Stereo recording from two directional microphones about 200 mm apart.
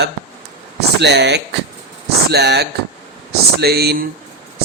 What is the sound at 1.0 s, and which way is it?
Speech, 55° right (ahead or behind).